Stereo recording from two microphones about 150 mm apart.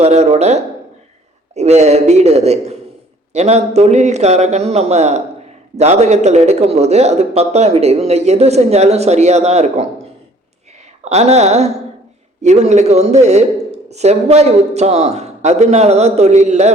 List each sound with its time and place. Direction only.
0.0 s a man's voice: 45° right (ahead or behind)
11.0 s a man's voice: 45° right (ahead or behind)